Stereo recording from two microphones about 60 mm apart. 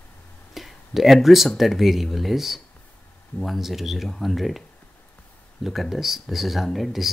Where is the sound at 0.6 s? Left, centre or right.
Centre.